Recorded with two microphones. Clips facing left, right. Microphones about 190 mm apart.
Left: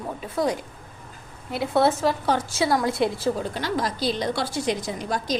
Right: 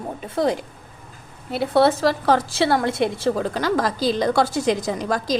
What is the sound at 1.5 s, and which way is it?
Speech, 30° right (ahead or behind).